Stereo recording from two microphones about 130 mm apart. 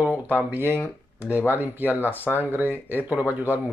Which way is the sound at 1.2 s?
15° right (ahead or behind).